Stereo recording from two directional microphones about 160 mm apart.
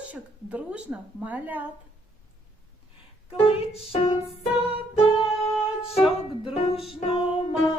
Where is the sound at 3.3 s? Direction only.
35° left (ahead or behind).